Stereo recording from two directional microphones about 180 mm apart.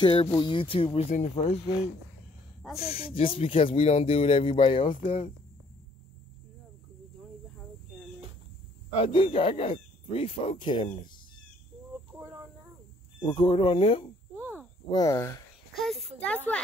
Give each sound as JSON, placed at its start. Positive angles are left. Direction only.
{"t": 0.0, "sound": "speech", "side_deg": 30}
{"t": 2.8, "sound": "speech", "side_deg": 35}
{"t": 8.9, "sound": "speech", "side_deg": 30}
{"t": 13.2, "sound": "speech", "side_deg": 25}
{"t": 14.4, "sound": "a sound", "side_deg": -10}
{"t": 14.9, "sound": "speech", "side_deg": 20}
{"t": 15.7, "sound": "a child's voice", "side_deg": 0}